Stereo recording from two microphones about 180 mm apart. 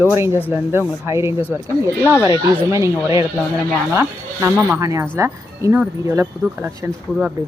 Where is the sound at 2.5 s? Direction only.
15° right (ahead or behind).